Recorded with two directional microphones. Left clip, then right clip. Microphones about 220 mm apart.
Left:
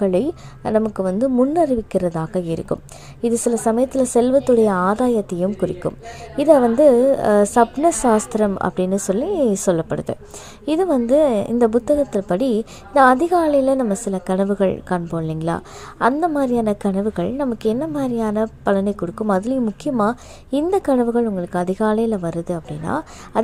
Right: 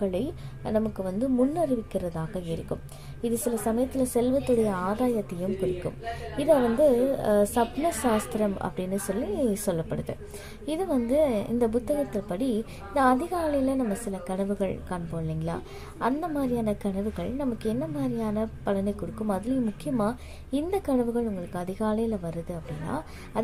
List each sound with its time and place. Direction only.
0.0 s a woman's voice: 35° left (ahead or behind)